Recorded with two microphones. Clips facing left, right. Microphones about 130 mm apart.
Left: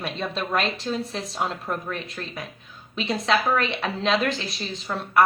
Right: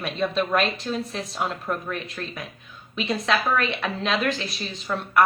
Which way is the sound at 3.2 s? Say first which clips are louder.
Left 1 dB; 30° left (ahead or behind).